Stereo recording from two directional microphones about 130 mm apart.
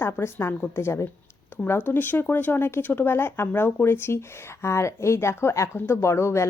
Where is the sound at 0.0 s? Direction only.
20° left (ahead or behind).